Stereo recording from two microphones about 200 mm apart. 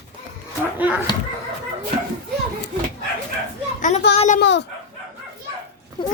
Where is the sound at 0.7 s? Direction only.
5° right (ahead or behind).